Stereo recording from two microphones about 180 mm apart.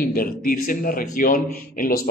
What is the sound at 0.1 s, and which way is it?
A man's voice, 55° left (ahead or behind).